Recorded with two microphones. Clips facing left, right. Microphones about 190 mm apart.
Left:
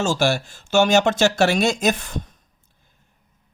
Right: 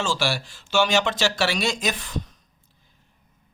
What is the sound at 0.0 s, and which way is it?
Speech, 45° left (ahead or behind).